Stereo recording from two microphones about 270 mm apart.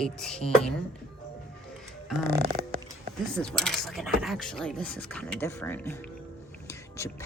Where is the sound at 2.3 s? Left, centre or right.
Right.